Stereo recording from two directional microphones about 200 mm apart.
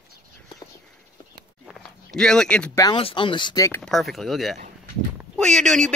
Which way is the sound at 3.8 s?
Centre (ahead or behind).